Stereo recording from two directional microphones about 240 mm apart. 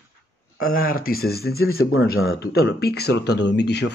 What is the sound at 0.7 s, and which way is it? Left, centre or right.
Speech, left.